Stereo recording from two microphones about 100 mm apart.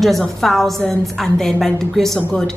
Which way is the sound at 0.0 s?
Centre (ahead or behind).